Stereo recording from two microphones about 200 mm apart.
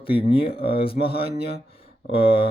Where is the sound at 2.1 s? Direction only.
25° left (ahead or behind).